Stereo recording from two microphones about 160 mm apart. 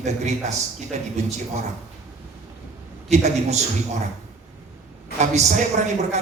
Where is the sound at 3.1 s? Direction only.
45° right (ahead or behind).